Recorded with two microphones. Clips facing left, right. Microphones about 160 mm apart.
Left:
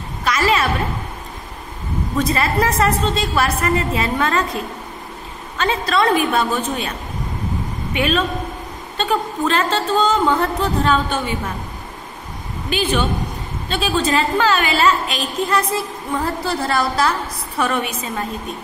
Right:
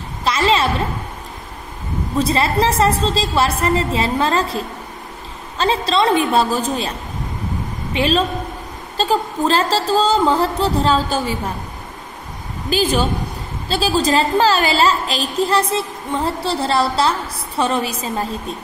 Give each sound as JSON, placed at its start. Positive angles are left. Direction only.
{"t": 0.2, "sound": "a sound", "side_deg": -25}
{"t": 2.1, "sound": "a woman's voice", "side_deg": -30}
{"t": 7.9, "sound": "a woman's voice", "side_deg": -30}
{"t": 12.6, "sound": "a woman's voice", "side_deg": -35}